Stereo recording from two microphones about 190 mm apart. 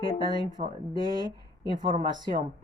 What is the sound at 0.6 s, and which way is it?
Speech, 35° right (ahead or behind).